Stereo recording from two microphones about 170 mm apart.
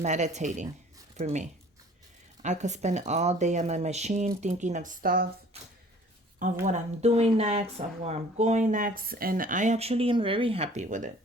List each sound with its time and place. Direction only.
0.0 s speech: 45° right (ahead or behind); by 5.3 s 60° right (ahead or behind)
6.7 s speech: 40° right (ahead or behind)